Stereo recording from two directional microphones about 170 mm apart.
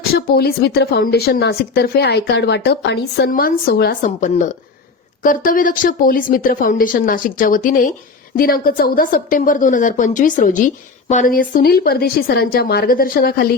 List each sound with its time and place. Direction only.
0.0 s a woman's voice: 65° left (ahead or behind)
4.0 s a woman's voice: 50° left (ahead or behind)